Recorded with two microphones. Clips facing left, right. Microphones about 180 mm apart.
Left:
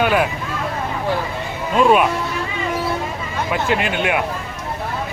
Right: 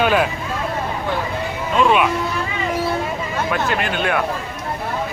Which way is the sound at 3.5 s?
20° left (ahead or behind).